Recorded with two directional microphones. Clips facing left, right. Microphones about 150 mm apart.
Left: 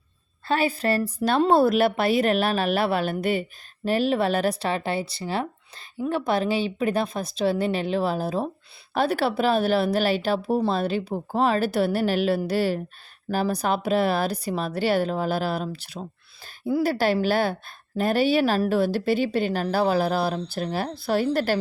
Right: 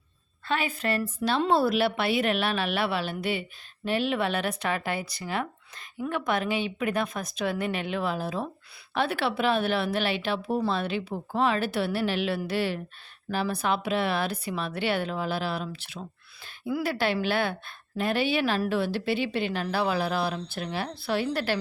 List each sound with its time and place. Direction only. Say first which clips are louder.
0.4 s a woman's voice: left 5 dB; 35° left (ahead or behind)